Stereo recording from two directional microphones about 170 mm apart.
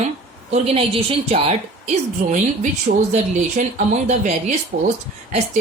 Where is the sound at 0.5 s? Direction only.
35° right (ahead or behind).